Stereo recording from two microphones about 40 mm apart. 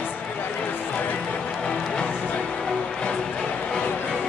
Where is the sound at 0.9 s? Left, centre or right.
Left.